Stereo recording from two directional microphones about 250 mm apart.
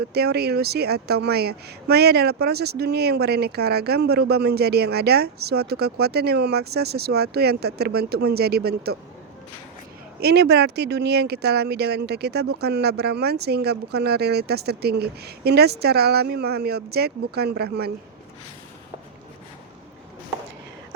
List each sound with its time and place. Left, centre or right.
0.1 s speech: right
10.2 s speech: right